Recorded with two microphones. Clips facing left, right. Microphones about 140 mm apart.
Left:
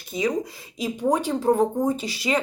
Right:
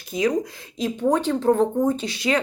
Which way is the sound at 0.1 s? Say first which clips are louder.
Right 3 dB; centre (ahead or behind).